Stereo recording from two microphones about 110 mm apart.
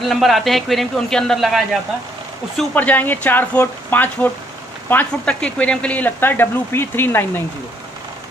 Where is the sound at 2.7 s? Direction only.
15° left (ahead or behind).